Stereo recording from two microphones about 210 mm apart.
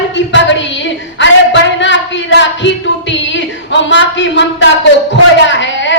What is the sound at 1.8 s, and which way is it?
Female singing, 60° left (ahead or behind).